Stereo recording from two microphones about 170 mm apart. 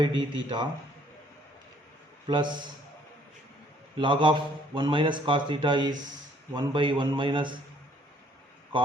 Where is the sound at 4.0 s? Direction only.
30° right (ahead or behind).